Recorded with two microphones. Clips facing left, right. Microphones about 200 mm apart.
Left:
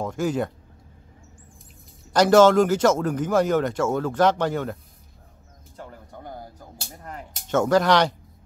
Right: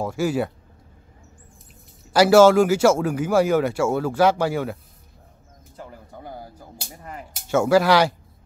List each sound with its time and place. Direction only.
0.0 s speech: 10° right (ahead or behind)
2.1 s speech: 10° right (ahead or behind)
5.8 s a sound: 5° right (ahead or behind)